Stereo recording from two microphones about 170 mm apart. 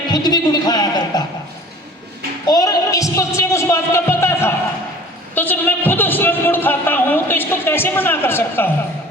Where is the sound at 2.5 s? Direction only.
20° left (ahead or behind).